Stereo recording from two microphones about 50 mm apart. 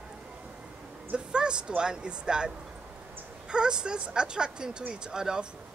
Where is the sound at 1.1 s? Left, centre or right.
Centre.